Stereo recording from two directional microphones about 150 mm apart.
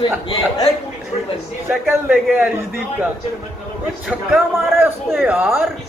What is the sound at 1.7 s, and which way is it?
Speech, centre (ahead or behind).